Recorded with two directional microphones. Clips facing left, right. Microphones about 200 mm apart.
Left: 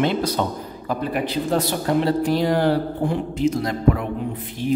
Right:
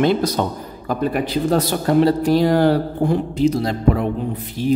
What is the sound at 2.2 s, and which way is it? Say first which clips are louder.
A man's voice: right 4 dB; 40° right (ahead or behind).